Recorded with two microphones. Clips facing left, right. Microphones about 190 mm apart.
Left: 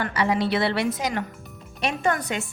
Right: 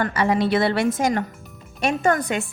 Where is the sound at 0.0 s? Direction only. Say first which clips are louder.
Right 3 dB; 50° right (ahead or behind).